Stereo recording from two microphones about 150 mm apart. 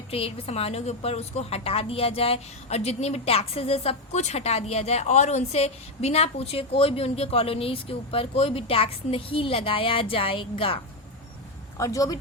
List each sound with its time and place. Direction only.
0.1 s a woman's voice: 40° left (ahead or behind)
11.8 s speech: 20° left (ahead or behind)